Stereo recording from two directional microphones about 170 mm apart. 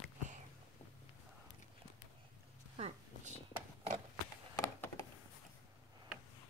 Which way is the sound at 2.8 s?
40° right (ahead or behind).